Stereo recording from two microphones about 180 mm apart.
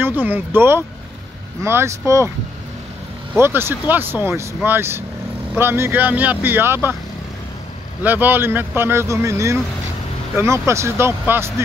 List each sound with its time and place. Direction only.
0.0 s speech: 10° right (ahead or behind)
3.3 s speech: 15° right (ahead or behind)
8.0 s speech: 10° right (ahead or behind)